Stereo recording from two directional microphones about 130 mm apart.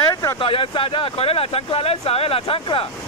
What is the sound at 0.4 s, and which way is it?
Speech, 45° left (ahead or behind).